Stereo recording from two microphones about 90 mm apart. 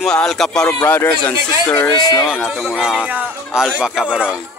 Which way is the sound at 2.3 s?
10° right (ahead or behind).